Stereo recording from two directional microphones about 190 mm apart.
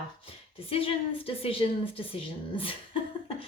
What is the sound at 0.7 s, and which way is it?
A woman's voice, 30° left (ahead or behind).